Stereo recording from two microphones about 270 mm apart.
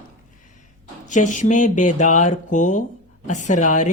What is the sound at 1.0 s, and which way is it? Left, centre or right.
Speech, left.